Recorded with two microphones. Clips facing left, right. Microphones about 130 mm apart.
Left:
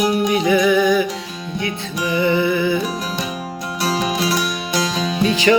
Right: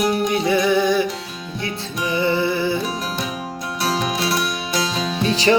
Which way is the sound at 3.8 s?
Centre (ahead or behind).